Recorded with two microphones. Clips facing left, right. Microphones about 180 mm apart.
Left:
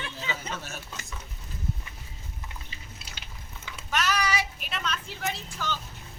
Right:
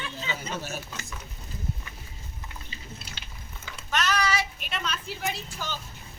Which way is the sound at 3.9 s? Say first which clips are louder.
Right 1 dB; 10° left (ahead or behind).